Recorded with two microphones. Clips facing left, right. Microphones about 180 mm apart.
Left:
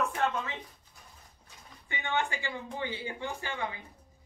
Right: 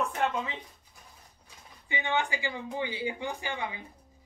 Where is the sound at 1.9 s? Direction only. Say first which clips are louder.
Right 2 dB; 15° right (ahead or behind).